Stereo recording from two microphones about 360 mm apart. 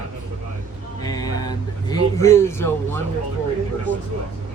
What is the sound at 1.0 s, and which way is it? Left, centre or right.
Speech, centre.